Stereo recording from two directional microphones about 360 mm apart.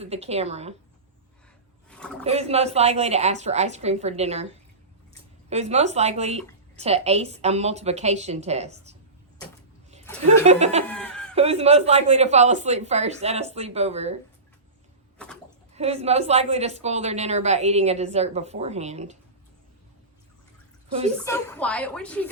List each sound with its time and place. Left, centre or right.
0.0 s a woman's voice: centre
1.9 s a sound: centre
2.2 s a woman's voice: centre
5.5 s a woman's voice: centre
10.4 s a woman's voice: centre
10.8 s snicker: centre
11.3 s a woman's voice: centre
15.7 s a woman's voice: centre
21.2 s a woman's voice: centre